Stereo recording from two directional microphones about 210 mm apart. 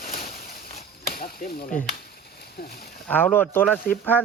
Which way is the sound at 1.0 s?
45° left (ahead or behind).